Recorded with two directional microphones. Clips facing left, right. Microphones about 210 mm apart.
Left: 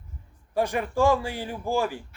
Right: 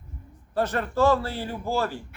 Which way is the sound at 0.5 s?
10° left (ahead or behind).